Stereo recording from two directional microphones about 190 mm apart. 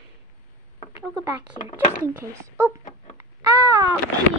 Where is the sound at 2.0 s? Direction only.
15° right (ahead or behind).